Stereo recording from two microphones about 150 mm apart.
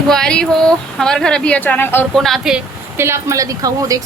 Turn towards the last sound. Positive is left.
turn(degrees=-25)  # may be behind; listen again after turning